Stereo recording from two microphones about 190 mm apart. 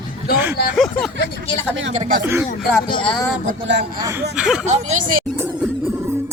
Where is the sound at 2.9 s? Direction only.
25° left (ahead or behind).